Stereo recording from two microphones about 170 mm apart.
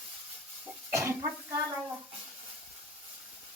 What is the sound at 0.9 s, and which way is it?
Speech, 15° right (ahead or behind).